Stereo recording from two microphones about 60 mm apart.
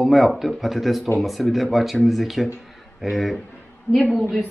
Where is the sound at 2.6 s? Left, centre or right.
Centre.